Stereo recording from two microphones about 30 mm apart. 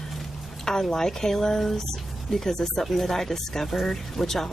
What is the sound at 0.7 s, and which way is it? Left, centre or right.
Speech, centre.